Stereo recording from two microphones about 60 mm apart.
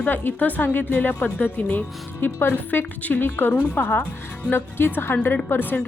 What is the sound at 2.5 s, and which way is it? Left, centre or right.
A woman's voice, left.